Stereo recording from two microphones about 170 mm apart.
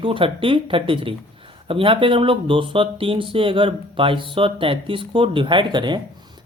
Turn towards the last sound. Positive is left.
turn(degrees=-25)  # may be behind; listen again after turning